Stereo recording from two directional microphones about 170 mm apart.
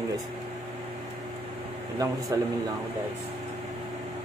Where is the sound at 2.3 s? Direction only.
20° right (ahead or behind).